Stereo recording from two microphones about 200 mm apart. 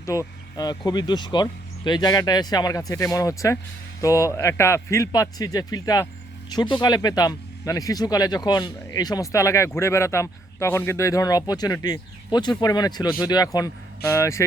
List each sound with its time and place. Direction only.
0.0 s a man's voice: 15° left (ahead or behind)